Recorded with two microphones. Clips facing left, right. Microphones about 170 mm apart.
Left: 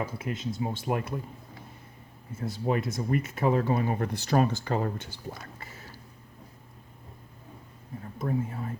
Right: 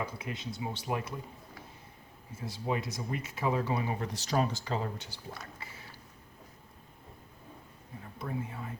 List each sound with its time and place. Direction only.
0.0 s speech: 50° left (ahead or behind)
2.4 s speech: 55° left (ahead or behind)
8.2 s speech: 40° left (ahead or behind)